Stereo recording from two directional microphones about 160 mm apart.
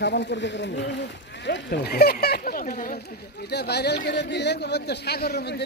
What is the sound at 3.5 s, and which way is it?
Speech, 90° left.